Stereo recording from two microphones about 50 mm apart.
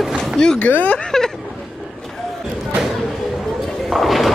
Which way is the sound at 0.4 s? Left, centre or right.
Centre.